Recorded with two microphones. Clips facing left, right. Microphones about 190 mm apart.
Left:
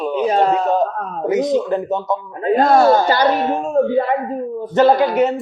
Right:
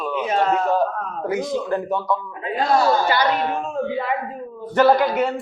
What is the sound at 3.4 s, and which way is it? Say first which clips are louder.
Speech: left 4 dB; 20° left (ahead or behind).